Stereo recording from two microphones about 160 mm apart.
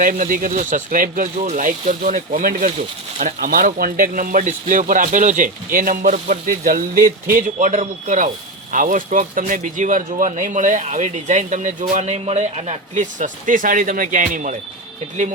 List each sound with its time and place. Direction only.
0.0 s speech: 60° right (ahead or behind)